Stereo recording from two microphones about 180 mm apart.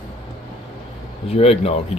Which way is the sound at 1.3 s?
35° left (ahead or behind).